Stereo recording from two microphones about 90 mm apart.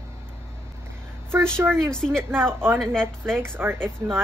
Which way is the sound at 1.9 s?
5° left (ahead or behind).